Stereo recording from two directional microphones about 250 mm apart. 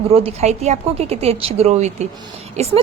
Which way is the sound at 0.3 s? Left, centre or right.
Right.